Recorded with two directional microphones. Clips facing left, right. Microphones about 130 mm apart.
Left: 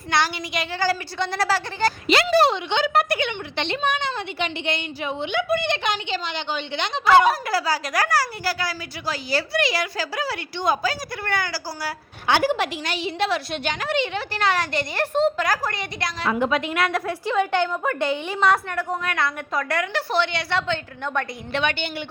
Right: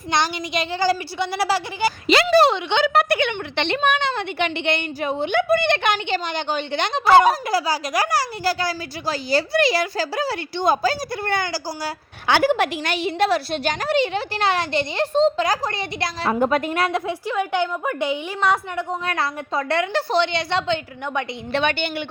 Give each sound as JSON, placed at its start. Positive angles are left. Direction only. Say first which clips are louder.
{"t": 0.1, "sound": "a woman's voice", "louder": "right 1 dB", "side_deg": -20}
{"t": 2.3, "sound": "a woman's voice", "louder": "right 3 dB", "side_deg": -80}
{"t": 4.9, "sound": "a woman's voice", "louder": "right 4 dB", "side_deg": -45}
{"t": 7.4, "sound": "a woman's voice", "louder": "right 2 dB", "side_deg": -15}
{"t": 12.3, "sound": "a woman's voice", "louder": "right 3 dB", "side_deg": -60}
{"t": 16.5, "sound": "a woman's voice", "louder": "right 2 dB", "side_deg": -45}
{"t": 17.2, "sound": "a woman's voice", "louder": "left 3 dB", "side_deg": -10}
{"t": 21.5, "sound": "a woman's voice", "louder": "right 3 dB", "side_deg": -35}